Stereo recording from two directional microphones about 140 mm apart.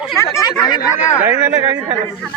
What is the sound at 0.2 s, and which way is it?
Speech, 20° left (ahead or behind).